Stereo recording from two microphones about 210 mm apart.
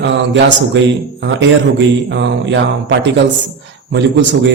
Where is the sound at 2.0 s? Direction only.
60° right (ahead or behind).